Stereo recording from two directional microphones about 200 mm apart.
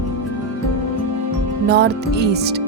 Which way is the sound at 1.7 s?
55° right (ahead or behind).